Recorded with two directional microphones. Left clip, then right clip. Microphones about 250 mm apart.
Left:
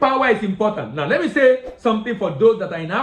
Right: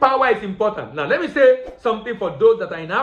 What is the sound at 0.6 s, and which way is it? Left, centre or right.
A woman's voice, centre.